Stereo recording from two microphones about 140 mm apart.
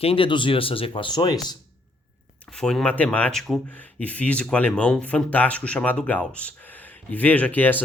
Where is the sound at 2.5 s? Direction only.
5° left (ahead or behind).